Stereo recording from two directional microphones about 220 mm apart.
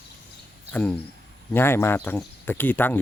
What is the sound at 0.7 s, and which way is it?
Speech, 5° left (ahead or behind).